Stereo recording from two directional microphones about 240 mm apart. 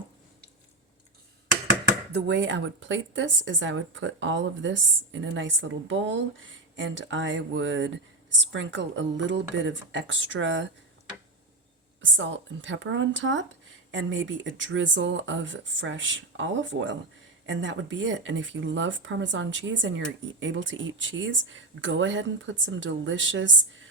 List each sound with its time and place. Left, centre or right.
2.1 s speech: right
12.1 s speech: right